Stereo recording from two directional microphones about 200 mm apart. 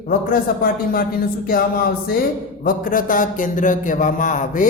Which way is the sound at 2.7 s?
40° left (ahead or behind).